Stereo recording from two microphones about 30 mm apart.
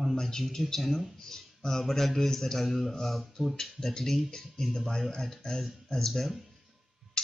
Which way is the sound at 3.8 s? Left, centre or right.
Left.